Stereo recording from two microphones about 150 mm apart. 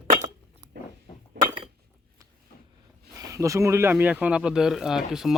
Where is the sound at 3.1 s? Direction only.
20° right (ahead or behind).